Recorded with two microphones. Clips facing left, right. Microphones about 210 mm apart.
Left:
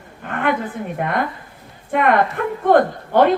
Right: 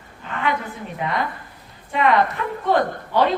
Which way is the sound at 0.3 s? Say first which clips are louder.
Left 4 dB; 55° left (ahead or behind).